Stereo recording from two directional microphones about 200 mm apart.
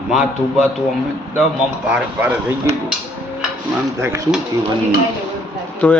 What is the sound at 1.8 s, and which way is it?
Speech, 10° right (ahead or behind).